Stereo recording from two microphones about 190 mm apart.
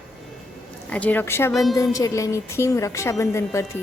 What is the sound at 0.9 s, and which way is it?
A woman's voice, 5° left (ahead or behind).